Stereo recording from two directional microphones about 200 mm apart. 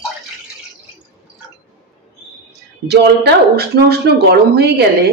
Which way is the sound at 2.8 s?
55° right (ahead or behind).